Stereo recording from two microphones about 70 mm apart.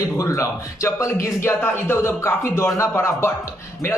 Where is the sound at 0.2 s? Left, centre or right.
Left.